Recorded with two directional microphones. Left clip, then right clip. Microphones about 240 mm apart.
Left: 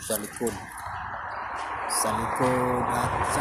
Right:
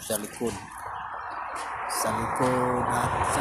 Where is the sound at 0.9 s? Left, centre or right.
Left.